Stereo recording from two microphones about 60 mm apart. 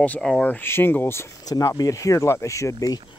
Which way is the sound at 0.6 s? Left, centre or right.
Left.